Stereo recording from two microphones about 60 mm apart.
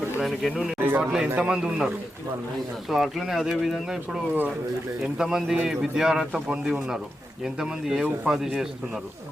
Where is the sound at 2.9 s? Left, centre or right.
Centre.